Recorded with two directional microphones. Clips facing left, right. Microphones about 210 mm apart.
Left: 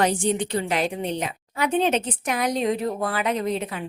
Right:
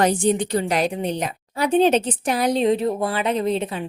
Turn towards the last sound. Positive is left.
turn(degrees=-30)  # may be behind; listen again after turning